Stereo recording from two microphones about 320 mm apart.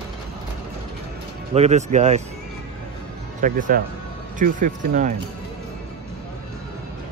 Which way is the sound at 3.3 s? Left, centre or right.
Right.